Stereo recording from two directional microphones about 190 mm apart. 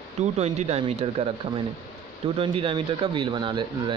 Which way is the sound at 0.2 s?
35° right (ahead or behind).